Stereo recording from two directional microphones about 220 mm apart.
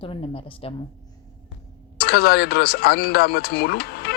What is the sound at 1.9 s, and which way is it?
Speech, 45° left (ahead or behind).